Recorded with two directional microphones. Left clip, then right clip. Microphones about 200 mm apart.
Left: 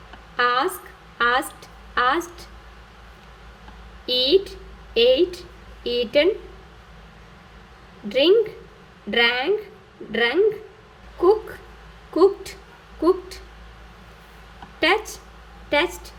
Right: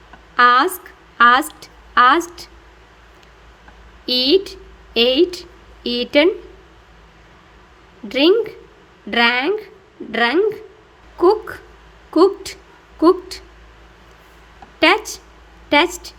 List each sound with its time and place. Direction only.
0.3 s a woman's voice: 55° right (ahead or behind)
4.0 s a woman's voice: 50° right (ahead or behind)
8.1 s a woman's voice: 50° right (ahead or behind)
14.8 s a woman's voice: 50° right (ahead or behind)